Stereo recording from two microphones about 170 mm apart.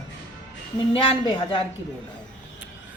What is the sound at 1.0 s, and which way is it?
Speech, 30° left (ahead or behind).